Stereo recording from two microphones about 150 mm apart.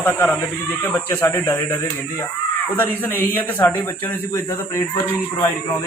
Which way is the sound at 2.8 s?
15° left (ahead or behind).